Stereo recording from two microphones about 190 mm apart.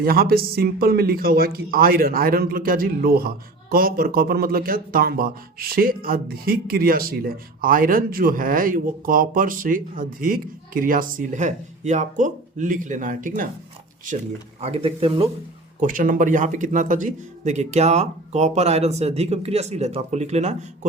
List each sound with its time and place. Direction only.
0.0 s speech: 50° right (ahead or behind)
14.6 s a man's voice: 30° right (ahead or behind)
15.8 s a man's voice: 45° right (ahead or behind)